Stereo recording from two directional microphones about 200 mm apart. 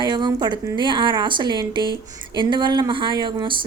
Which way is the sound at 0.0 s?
20° right (ahead or behind).